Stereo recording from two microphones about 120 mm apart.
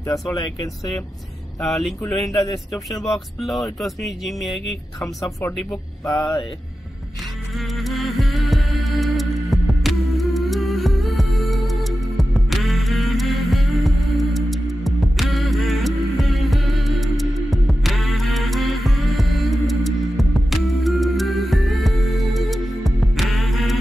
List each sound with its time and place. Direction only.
1.6 s speech: centre (ahead or behind)
2.4 s a man's voice: 30° left (ahead or behind)
3.0 s speech: centre (ahead or behind)
6.0 s mantra: 30° left (ahead or behind)
7.5 s music: centre (ahead or behind)